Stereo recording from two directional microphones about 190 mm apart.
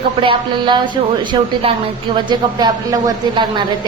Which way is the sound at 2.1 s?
20° right (ahead or behind).